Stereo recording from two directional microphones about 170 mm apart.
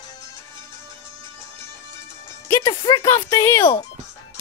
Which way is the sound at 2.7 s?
25° left (ahead or behind).